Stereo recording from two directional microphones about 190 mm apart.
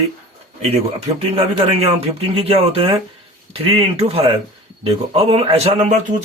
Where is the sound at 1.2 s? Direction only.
30° right (ahead or behind).